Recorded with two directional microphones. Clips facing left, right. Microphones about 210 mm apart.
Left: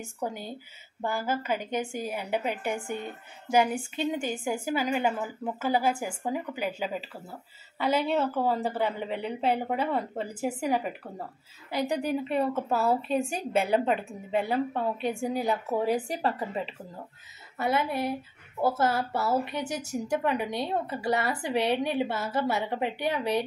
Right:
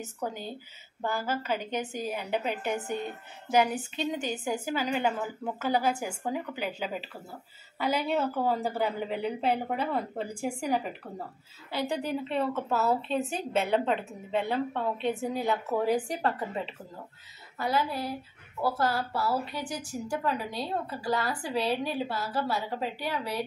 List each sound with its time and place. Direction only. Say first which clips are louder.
1.0 s a woman's voice: left 1 dB; 10° left (ahead or behind)
11.7 s a woman's voice: left 3 dB; 15° left (ahead or behind)
17.6 s a woman's voice: left 2 dB; 25° left (ahead or behind)